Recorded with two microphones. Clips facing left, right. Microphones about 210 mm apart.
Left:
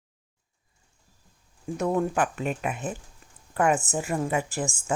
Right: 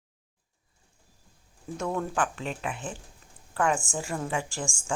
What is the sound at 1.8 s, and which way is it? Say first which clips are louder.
A woman's voice: left 4 dB; 15° left (ahead or behind).